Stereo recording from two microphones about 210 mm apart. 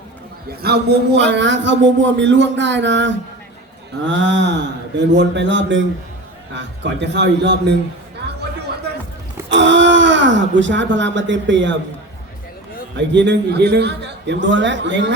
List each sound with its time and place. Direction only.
0.6 s a man's voice: 50° right (ahead or behind)
9.5 s a man's voice: 60° right (ahead or behind)
13.0 s a man's voice: 55° right (ahead or behind)